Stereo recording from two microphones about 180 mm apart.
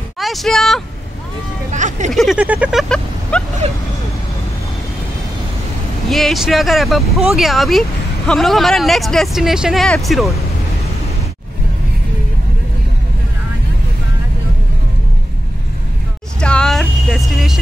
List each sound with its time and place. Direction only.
0.2 s speech: centre (ahead or behind)
1.7 s speech: 40° right (ahead or behind)
2.1 s speech: 5° right (ahead or behind)
6.0 s speech: centre (ahead or behind)
16.3 s vehicle: 5° left (ahead or behind)